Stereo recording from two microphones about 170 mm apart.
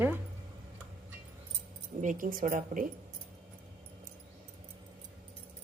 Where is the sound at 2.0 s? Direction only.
50° right (ahead or behind).